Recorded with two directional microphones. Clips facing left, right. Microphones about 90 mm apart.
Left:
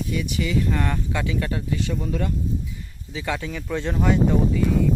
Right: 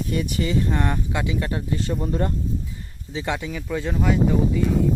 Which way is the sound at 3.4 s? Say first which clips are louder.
Even; 5° right (ahead or behind).